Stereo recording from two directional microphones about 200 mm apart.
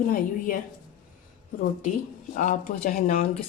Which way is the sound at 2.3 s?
40° left (ahead or behind).